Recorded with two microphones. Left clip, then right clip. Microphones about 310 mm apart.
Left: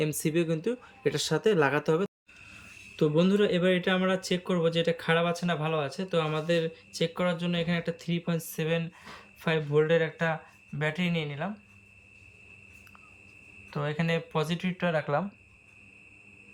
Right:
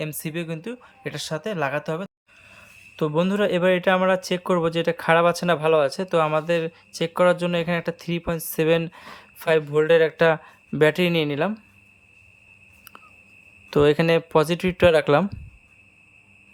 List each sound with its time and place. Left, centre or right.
0.0 s speech: centre
14.1 s speech: centre